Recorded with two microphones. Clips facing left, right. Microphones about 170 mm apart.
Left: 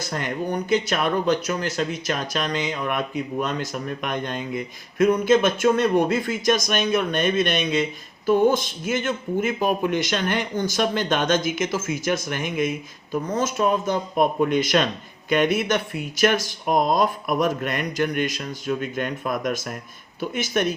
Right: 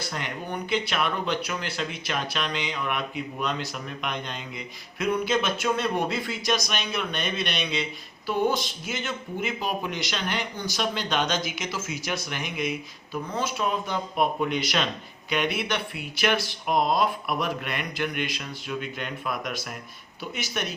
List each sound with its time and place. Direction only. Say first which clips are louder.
0.1 s speech: left 10 dB; 45° left (ahead or behind)